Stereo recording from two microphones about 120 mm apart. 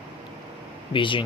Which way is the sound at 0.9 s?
45° left (ahead or behind).